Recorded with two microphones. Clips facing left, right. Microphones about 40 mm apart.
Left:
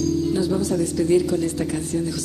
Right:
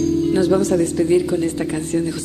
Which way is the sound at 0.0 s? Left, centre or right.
Right.